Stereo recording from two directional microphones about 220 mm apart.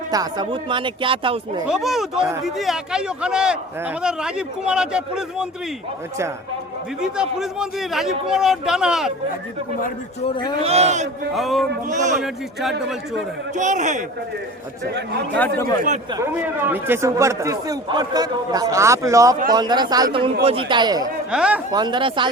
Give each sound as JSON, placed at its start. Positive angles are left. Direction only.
{"t": 0.1, "sound": "speech", "side_deg": -20}
{"t": 1.6, "sound": "a man's voice", "side_deg": 0}
{"t": 7.0, "sound": "a man's voice", "side_deg": -5}
{"t": 10.2, "sound": "speech", "side_deg": 20}
{"t": 10.6, "sound": "speech", "side_deg": -30}
{"t": 11.3, "sound": "a man's voice", "side_deg": 0}
{"t": 11.9, "sound": "a man's voice", "side_deg": -35}
{"t": 12.2, "sound": "a man's voice", "side_deg": 0}
{"t": 13.6, "sound": "a man's voice", "side_deg": -35}
{"t": 14.8, "sound": "speech", "side_deg": -50}
{"t": 15.4, "sound": "speech", "side_deg": 5}
{"t": 16.1, "sound": "a man's voice", "side_deg": -10}
{"t": 21.2, "sound": "a man's voice", "side_deg": -5}
{"t": 21.7, "sound": "speech", "side_deg": -20}